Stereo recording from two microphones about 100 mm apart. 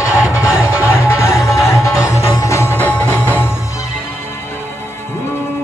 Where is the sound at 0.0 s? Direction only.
30° left (ahead or behind).